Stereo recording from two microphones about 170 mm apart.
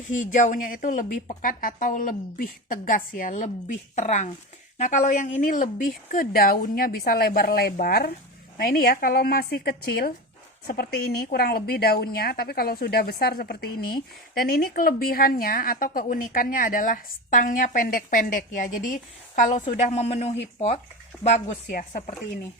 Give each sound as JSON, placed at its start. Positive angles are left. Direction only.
{"t": 0.1, "sound": "a woman's voice", "side_deg": 45}